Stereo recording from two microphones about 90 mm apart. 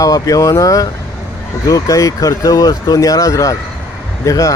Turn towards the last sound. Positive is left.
turn(degrees=35)  # may be behind; listen again after turning